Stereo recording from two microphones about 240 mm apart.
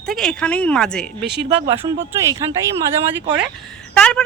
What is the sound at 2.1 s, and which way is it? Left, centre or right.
Speech, centre.